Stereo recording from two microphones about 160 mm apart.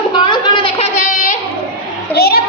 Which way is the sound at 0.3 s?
30° left (ahead or behind).